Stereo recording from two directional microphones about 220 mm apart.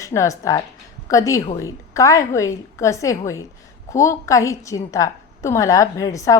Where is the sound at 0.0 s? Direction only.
15° left (ahead or behind).